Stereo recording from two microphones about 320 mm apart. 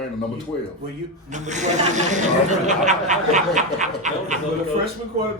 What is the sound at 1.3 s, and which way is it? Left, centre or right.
Speech, right.